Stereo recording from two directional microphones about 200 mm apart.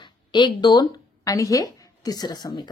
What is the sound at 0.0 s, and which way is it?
Speech, 25° left (ahead or behind).